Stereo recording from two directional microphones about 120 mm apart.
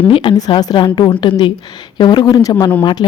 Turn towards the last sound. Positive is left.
turn(degrees=40)  # may be behind; listen again after turning